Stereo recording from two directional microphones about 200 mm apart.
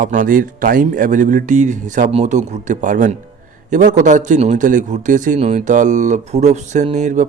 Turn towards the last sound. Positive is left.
turn(degrees=-35)  # may be behind; listen again after turning